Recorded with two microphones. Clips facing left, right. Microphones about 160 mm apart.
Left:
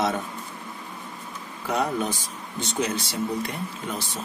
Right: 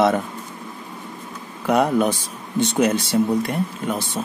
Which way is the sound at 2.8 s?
55° right (ahead or behind).